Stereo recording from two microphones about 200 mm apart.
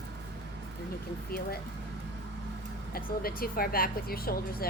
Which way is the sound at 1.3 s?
50° left (ahead or behind).